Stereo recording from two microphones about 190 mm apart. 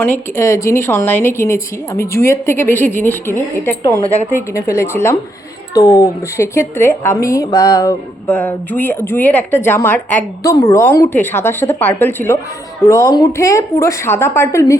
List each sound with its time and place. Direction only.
0.3 s a woman's voice: 15° left (ahead or behind)